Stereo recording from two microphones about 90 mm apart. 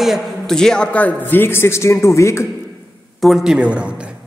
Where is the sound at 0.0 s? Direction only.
Centre (ahead or behind); by 2.4 s 35° left (ahead or behind).